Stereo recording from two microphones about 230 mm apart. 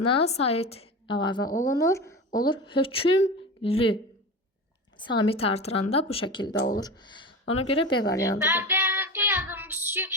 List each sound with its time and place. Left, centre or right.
0.0 s a woman's voice: left
4.9 s a woman's voice: left
8.4 s child singing: centre